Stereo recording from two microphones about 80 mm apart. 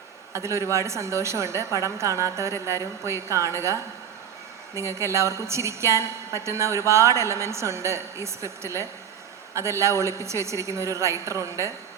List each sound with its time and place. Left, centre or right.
0.3 s a woman's voice: right
4.8 s a woman's voice: right